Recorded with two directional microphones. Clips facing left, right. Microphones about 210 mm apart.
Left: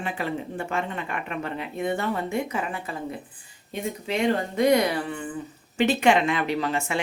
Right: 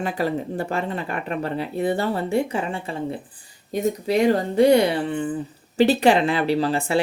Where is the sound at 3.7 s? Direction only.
40° right (ahead or behind).